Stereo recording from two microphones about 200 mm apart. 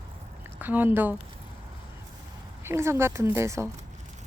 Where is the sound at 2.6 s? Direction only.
15° right (ahead or behind).